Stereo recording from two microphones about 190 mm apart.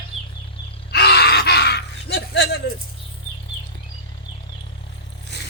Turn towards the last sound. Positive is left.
turn(degrees=65)  # may be behind; listen again after turning